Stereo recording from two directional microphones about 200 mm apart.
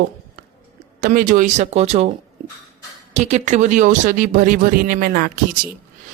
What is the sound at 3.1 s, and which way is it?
Speech, 35° right (ahead or behind).